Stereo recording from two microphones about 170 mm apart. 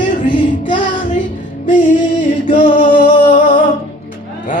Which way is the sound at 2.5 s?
45° left (ahead or behind).